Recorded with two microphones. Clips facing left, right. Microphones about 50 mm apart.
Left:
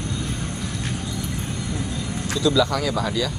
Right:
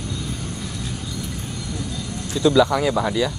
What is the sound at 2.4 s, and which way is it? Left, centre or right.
Speech, right.